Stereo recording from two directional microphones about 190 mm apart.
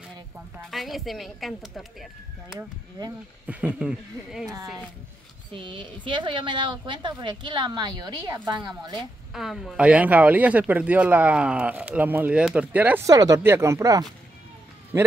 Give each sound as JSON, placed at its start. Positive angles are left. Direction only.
{"t": 0.7, "sound": "a woman's voice", "side_deg": 0}
{"t": 3.4, "sound": "a woman's voice", "side_deg": -5}
{"t": 5.5, "sound": "a woman's voice", "side_deg": -25}
{"t": 8.9, "sound": "speech", "side_deg": 0}